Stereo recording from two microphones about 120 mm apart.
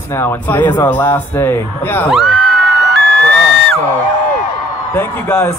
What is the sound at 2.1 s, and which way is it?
Music, centre (ahead or behind).